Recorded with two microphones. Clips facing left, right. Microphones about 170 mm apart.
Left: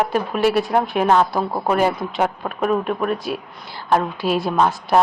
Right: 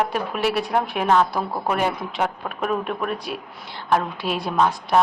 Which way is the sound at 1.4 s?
25° left (ahead or behind).